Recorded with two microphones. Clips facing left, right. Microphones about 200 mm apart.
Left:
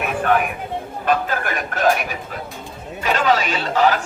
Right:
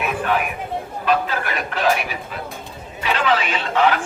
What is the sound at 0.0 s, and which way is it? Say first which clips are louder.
Chatter: left 2 dB; 50° left (ahead or behind).